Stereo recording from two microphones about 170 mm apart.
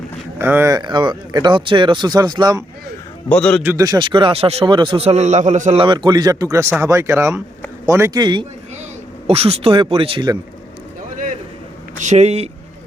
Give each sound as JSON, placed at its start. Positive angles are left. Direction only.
{"t": 0.3, "sound": "speech", "side_deg": -15}
{"t": 3.2, "sound": "a man's voice", "side_deg": 10}
{"t": 3.6, "sound": "speech", "side_deg": -15}
{"t": 5.8, "sound": "speech", "side_deg": -30}
{"t": 9.2, "sound": "speech", "side_deg": -35}
{"t": 11.9, "sound": "speech", "side_deg": -45}